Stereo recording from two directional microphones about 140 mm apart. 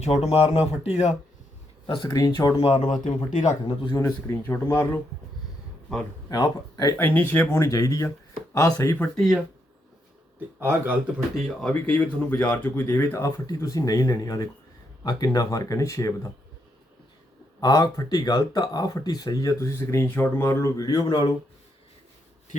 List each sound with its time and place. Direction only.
0.0 s speech: 50° left (ahead or behind)
1.9 s speech: 30° left (ahead or behind)
2.6 s speech: 45° left (ahead or behind)
3.2 s speech: 60° left (ahead or behind)
3.9 s speech: 20° left (ahead or behind)
6.2 s speech: 25° left (ahead or behind)
6.9 s speech: 10° left (ahead or behind)
9.0 s speech: 5° left (ahead or behind)
10.6 s speech: 15° right (ahead or behind)
11.3 s speech: 10° left (ahead or behind)
17.6 s speech: 25° left (ahead or behind)